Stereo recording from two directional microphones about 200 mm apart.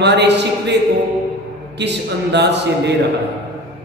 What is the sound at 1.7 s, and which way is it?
Mantra, 60° right (ahead or behind).